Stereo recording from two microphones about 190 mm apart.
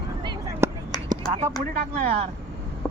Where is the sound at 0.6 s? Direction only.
15° right (ahead or behind).